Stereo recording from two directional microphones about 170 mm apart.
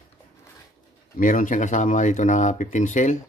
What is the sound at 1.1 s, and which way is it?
Speech, 50° left (ahead or behind).